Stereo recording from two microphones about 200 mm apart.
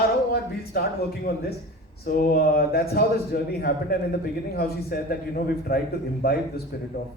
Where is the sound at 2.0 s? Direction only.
50° left (ahead or behind).